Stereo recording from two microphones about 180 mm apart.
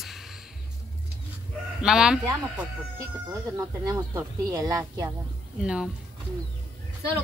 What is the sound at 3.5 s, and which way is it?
Speech, 20° right (ahead or behind).